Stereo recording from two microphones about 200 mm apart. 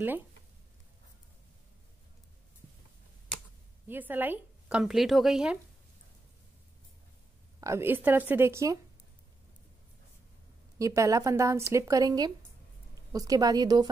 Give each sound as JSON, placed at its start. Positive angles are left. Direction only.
{"t": 3.8, "sound": "a woman's voice", "side_deg": -10}
{"t": 7.6, "sound": "a woman's voice", "side_deg": -10}
{"t": 10.8, "sound": "a woman's voice", "side_deg": -15}